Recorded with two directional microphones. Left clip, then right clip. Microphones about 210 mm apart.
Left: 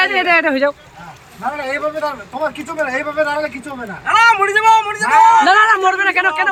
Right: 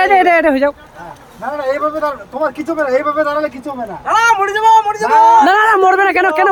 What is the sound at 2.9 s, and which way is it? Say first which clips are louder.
Speech: right 4 dB; 10° right (ahead or behind).